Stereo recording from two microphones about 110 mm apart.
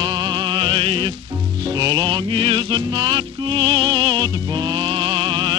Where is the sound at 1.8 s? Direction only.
40° right (ahead or behind).